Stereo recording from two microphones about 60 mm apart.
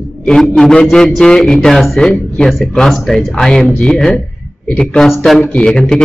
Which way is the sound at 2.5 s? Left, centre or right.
Centre.